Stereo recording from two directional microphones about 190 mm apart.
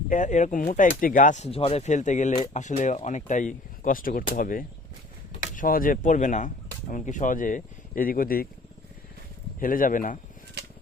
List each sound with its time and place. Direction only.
0.1 s speech: 40° left (ahead or behind)
9.6 s speech: 45° left (ahead or behind)